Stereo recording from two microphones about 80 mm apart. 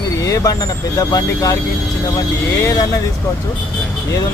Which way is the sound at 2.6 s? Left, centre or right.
Left.